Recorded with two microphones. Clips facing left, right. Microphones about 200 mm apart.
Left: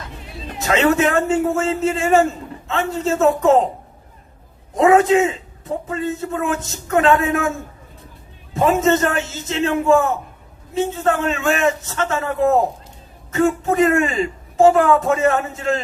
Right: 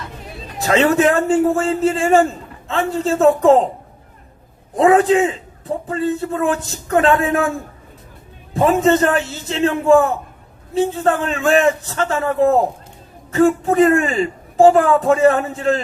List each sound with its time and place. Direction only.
0.6 s a man's voice: 35° right (ahead or behind)
4.8 s a man's voice: 35° right (ahead or behind)
8.5 s a man's voice: 35° right (ahead or behind)